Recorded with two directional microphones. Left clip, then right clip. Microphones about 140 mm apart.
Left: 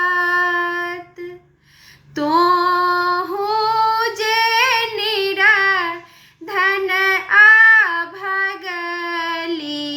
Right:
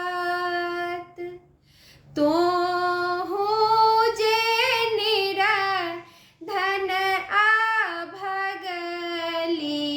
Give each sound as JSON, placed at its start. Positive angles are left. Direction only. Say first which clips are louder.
{"t": 0.0, "sound": "a sound", "louder": "left 10 dB", "side_deg": -40}
{"t": 2.1, "sound": "female singing", "louder": "left 6 dB", "side_deg": -45}
{"t": 6.4, "sound": "child singing", "louder": "left 7 dB", "side_deg": -40}